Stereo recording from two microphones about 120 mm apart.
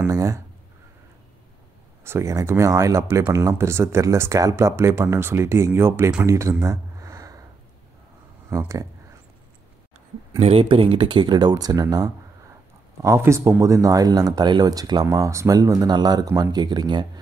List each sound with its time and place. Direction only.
0.0 s speech: 30° right (ahead or behind)
2.0 s speech: 25° right (ahead or behind)
6.6 s a sound: 25° right (ahead or behind)
8.5 s speech: 25° right (ahead or behind)
10.4 s speech: 50° right (ahead or behind)